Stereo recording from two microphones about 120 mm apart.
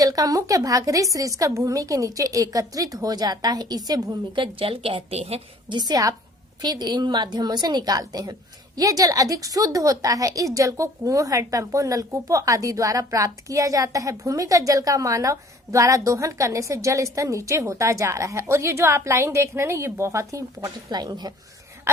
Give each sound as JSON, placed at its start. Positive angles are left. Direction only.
{"t": 0.0, "sound": "a woman's voice", "side_deg": -30}
{"t": 5.6, "sound": "a woman's voice", "side_deg": -35}